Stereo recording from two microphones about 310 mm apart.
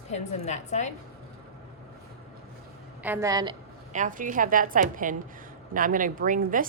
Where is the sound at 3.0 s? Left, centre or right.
Centre.